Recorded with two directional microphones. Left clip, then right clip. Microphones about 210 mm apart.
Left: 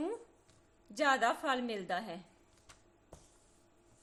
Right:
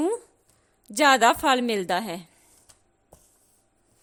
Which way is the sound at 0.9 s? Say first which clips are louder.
Right 13 dB; 50° right (ahead or behind).